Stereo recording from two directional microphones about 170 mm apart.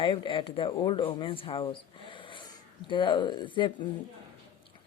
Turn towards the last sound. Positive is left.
turn(degrees=30)  # may be behind; listen again after turning